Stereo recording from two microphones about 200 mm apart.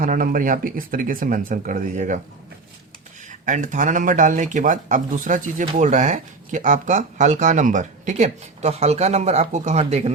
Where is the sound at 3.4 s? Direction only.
40° right (ahead or behind).